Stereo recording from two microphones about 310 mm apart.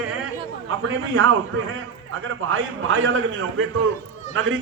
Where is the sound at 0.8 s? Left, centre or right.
Right.